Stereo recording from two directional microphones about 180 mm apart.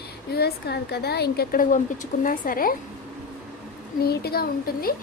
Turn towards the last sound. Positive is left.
turn(degrees=55)  # may be behind; listen again after turning